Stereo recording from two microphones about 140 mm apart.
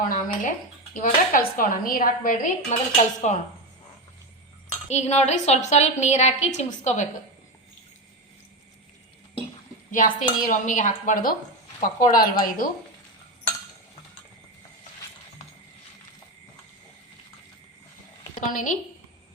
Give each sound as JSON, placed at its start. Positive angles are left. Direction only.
{"t": 0.1, "sound": "a woman's voice", "side_deg": 70}
{"t": 0.9, "sound": "a woman's voice", "side_deg": 80}
{"t": 4.9, "sound": "a woman's voice", "side_deg": 55}
{"t": 9.9, "sound": "a woman's voice", "side_deg": 70}
{"t": 18.3, "sound": "a woman's voice", "side_deg": 70}